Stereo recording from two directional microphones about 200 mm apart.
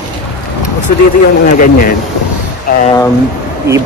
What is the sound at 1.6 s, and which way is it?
Speech, 45° left (ahead or behind).